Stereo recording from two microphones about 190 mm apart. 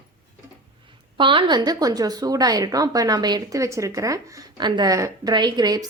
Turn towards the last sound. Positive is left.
turn(degrees=-20)  # may be behind; listen again after turning